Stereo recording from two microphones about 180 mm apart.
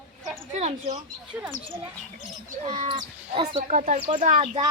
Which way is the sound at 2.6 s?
25° right (ahead or behind).